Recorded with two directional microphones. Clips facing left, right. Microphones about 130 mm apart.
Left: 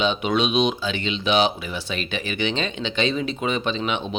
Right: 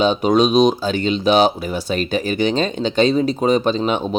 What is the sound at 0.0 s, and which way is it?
Speech, 40° right (ahead or behind).